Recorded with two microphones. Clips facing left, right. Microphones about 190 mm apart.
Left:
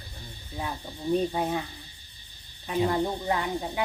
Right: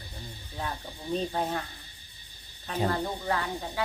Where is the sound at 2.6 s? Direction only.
15° left (ahead or behind).